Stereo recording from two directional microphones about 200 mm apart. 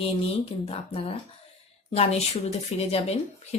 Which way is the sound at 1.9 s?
30° left (ahead or behind).